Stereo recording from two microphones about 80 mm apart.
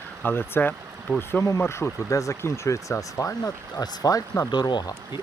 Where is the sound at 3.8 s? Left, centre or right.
Left.